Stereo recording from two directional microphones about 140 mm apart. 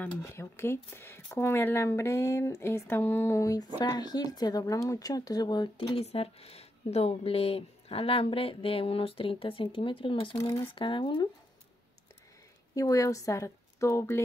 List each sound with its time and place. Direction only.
0.0 s speech: 20° left (ahead or behind); by 10.3 s 40° left (ahead or behind)
10.3 s speech: 20° left (ahead or behind)
10.7 s speech: 35° left (ahead or behind)
12.7 s a woman's voice: 20° left (ahead or behind)